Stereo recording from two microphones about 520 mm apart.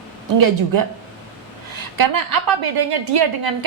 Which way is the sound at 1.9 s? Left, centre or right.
Right.